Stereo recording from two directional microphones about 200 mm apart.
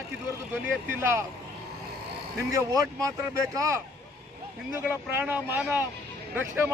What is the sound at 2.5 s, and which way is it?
Speech, 15° right (ahead or behind).